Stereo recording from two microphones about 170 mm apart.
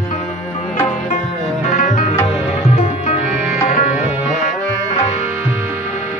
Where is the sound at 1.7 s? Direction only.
50° left (ahead or behind).